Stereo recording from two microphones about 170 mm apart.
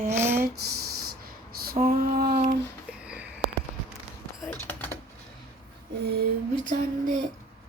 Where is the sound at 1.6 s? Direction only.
65° right (ahead or behind).